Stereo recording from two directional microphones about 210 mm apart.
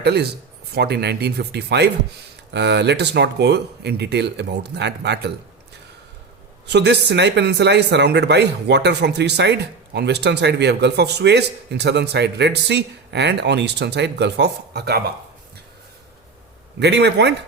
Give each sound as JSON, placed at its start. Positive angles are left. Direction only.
{"t": 0.0, "sound": "speech", "side_deg": -50}
{"t": 6.7, "sound": "speech", "side_deg": -55}
{"t": 16.8, "sound": "a man's voice", "side_deg": -55}